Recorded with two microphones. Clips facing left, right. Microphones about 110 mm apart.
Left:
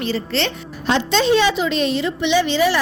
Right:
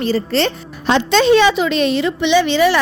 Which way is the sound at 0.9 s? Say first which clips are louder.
Right 4 dB; 65° right (ahead or behind).